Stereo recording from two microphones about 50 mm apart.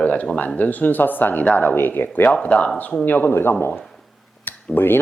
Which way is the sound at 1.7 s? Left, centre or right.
Left.